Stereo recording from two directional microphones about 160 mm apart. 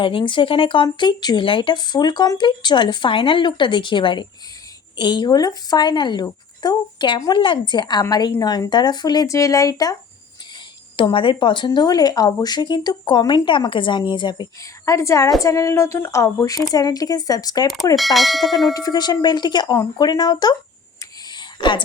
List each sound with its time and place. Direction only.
0.0 s speech: 30° left (ahead or behind)
10.9 s speech: 35° left (ahead or behind)
17.9 s bell: centre (ahead or behind)
18.7 s speech: 25° left (ahead or behind)
21.2 s a sound: 30° left (ahead or behind)